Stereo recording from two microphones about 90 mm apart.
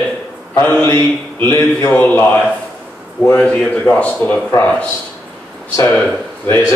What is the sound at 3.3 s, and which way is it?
Speech, 15° left (ahead or behind).